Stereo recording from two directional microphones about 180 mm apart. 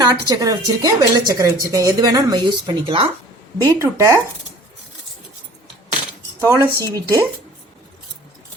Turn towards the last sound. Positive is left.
turn(degrees=-20)  # may be behind; listen again after turning